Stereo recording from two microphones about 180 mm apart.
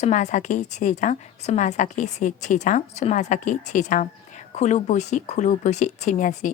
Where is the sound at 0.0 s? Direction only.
40° left (ahead or behind).